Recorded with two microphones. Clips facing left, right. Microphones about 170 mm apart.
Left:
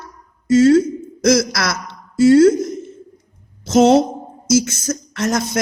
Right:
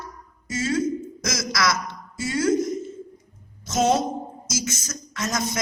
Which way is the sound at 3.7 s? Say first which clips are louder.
Left 9 dB; 70° left (ahead or behind).